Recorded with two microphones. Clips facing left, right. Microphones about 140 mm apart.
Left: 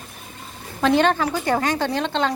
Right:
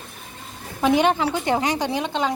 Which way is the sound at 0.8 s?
15° right (ahead or behind).